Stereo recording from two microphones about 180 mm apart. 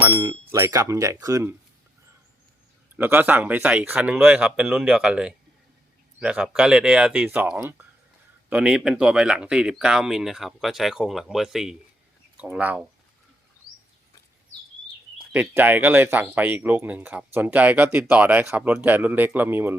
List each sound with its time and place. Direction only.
0.0 s speech: 15° right (ahead or behind)
2.9 s speech: 10° right (ahead or behind)
15.2 s speech: 10° right (ahead or behind)